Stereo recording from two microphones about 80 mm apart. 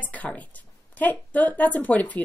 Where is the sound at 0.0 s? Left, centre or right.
Centre.